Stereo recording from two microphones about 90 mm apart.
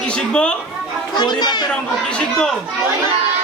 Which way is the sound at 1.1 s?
50° left (ahead or behind).